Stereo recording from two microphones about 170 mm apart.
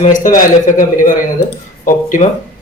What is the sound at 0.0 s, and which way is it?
Speech, 50° left (ahead or behind).